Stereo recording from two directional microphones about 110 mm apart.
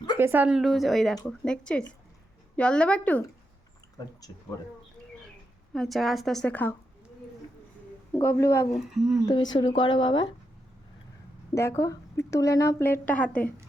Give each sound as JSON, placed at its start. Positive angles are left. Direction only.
{"t": 0.2, "sound": "a woman's voice", "side_deg": -20}
{"t": 5.7, "sound": "speech", "side_deg": 5}
{"t": 6.5, "sound": "a woman's voice", "side_deg": 15}
{"t": 8.1, "sound": "speech", "side_deg": 25}
{"t": 8.7, "sound": "speech", "side_deg": 0}
{"t": 9.2, "sound": "speech", "side_deg": 40}
{"t": 11.5, "sound": "speech", "side_deg": 25}